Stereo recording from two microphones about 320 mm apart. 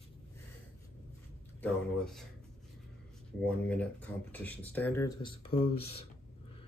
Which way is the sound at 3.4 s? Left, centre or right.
Centre.